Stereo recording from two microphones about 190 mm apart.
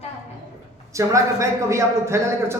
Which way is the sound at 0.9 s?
15° right (ahead or behind).